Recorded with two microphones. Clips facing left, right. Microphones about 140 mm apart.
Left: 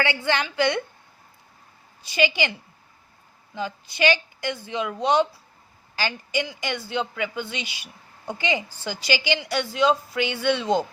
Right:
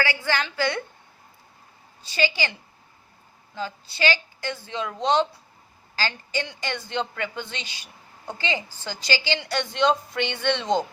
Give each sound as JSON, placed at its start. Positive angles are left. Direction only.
{"t": 0.0, "sound": "a woman's voice", "side_deg": 25}
{"t": 2.0, "sound": "a woman's voice", "side_deg": 15}
{"t": 3.5, "sound": "a woman's voice", "side_deg": 15}